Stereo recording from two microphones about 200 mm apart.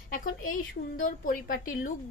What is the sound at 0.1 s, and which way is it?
A woman's voice, 45° left (ahead or behind).